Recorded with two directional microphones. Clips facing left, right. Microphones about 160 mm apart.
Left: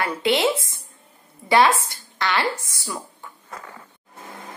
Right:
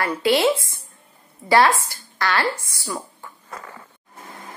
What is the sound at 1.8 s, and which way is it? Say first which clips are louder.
A woman's voice: right 1 dB; 20° left (ahead or behind).